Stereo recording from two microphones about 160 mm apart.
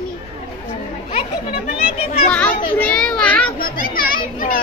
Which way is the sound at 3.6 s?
65° left (ahead or behind).